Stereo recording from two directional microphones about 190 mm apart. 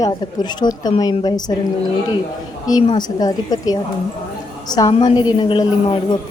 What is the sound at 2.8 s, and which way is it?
A woman's voice, 20° left (ahead or behind).